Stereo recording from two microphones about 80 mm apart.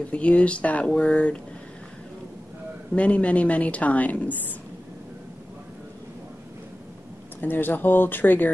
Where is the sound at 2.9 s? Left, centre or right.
Centre.